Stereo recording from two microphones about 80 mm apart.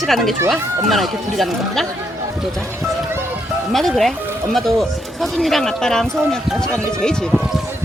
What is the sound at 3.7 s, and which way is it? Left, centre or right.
Speech, centre.